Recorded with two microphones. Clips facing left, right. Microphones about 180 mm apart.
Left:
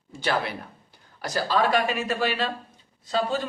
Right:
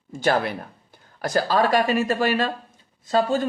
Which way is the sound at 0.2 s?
45° right (ahead or behind).